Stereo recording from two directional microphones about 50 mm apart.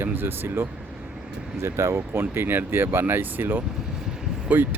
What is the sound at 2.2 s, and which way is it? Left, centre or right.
Speech, right.